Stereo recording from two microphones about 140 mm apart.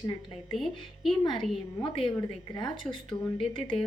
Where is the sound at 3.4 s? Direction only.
40° left (ahead or behind).